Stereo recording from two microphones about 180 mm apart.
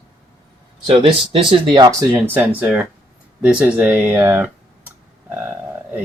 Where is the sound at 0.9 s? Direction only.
30° right (ahead or behind).